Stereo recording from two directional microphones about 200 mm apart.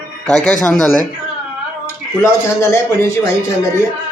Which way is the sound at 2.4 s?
15° left (ahead or behind).